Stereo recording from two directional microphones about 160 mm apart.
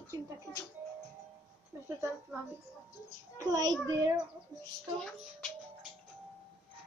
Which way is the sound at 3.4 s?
20° right (ahead or behind).